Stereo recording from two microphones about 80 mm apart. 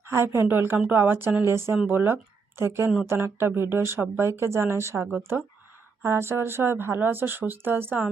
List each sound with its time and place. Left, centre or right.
0.0 s speech: right